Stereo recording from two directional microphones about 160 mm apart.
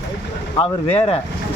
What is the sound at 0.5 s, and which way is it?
Speech, 35° left (ahead or behind).